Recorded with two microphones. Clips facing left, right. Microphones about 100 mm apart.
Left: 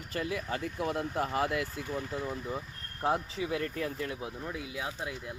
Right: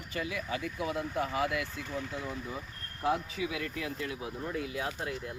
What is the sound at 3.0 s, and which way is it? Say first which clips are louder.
Speech: left 1 dB; 35° left (ahead or behind).